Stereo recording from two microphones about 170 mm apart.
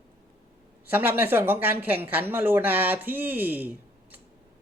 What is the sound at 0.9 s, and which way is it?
Speech, 10° right (ahead or behind).